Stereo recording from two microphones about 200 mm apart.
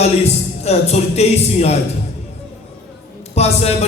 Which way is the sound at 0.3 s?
30° left (ahead or behind).